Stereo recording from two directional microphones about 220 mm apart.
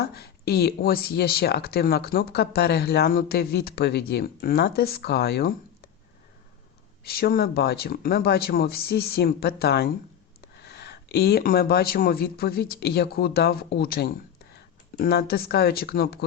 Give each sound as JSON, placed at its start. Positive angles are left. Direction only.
{"t": 0.0, "sound": "speech", "side_deg": 45}
{"t": 7.0, "sound": "speech", "side_deg": 45}